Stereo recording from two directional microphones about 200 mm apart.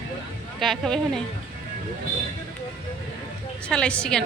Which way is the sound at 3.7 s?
5° left (ahead or behind).